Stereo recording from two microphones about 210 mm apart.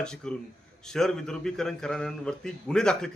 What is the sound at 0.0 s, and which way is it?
Speech, 5° left (ahead or behind).